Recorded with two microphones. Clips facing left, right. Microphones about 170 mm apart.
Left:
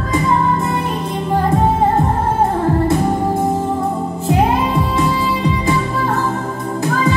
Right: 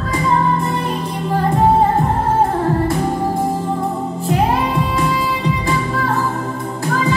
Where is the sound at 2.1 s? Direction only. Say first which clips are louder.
Even; 20° left (ahead or behind).